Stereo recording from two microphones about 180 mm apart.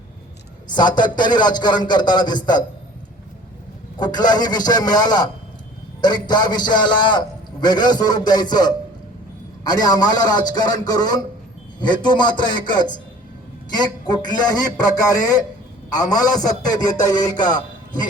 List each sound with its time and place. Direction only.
0.7 s a man's voice: 25° left (ahead or behind)
3.9 s a man's voice: 25° left (ahead or behind)
14.1 s a man's voice: 20° left (ahead or behind)